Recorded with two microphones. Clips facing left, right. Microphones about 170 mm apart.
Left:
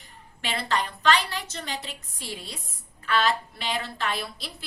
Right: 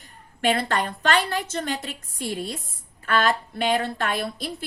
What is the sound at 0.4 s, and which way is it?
A woman's voice, 50° right (ahead or behind).